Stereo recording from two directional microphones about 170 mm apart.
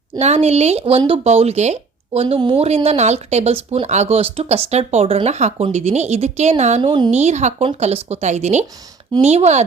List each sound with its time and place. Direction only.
0.2 s speech: 40° right (ahead or behind)
7.1 s speech: 40° right (ahead or behind)